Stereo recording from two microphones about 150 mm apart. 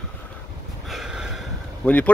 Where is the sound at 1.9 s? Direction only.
10° left (ahead or behind).